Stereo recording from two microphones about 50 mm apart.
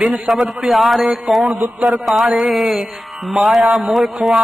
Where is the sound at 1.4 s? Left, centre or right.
Right.